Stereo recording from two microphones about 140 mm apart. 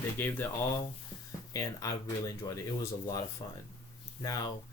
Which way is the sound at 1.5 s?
25° left (ahead or behind).